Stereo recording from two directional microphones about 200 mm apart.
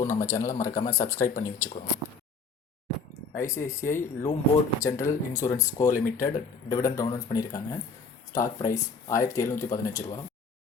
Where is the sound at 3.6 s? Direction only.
15° left (ahead or behind).